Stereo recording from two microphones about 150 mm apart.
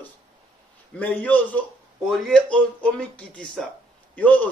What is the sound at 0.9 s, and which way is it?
A man's voice, 10° left (ahead or behind).